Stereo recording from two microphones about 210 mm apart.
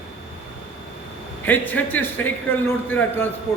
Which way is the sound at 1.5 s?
10° left (ahead or behind).